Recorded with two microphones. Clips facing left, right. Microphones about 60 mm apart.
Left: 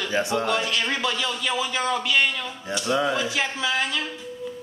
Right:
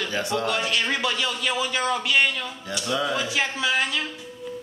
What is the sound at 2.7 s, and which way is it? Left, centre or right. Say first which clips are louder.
Speech: left 3 dB; left.